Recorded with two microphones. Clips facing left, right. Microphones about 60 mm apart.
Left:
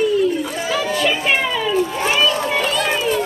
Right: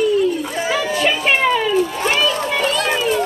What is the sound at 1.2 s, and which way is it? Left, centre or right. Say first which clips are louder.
Music: right 3 dB; right.